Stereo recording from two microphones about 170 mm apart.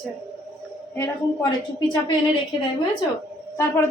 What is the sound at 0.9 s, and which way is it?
Speech, 20° left (ahead or behind).